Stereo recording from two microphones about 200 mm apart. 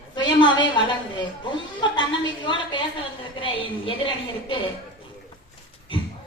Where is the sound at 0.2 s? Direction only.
25° left (ahead or behind).